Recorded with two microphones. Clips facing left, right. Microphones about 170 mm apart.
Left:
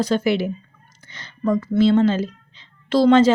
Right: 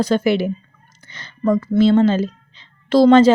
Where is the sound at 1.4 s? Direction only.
50° right (ahead or behind).